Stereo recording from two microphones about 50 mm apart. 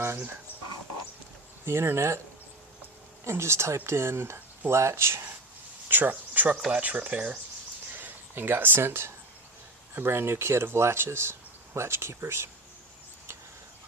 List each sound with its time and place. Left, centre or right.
1.6 s speech: right
3.2 s speech: right
4.7 s speech: right
5.9 s speech: right
7.9 s speech: right